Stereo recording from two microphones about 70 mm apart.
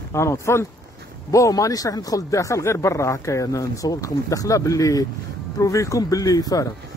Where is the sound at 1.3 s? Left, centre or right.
Left.